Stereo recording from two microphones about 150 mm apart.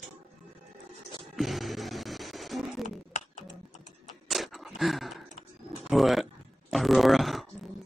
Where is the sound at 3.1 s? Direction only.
50° left (ahead or behind).